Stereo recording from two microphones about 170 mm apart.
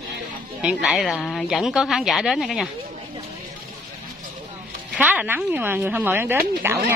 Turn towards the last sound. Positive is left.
turn(degrees=-15)  # may be behind; listen again after turning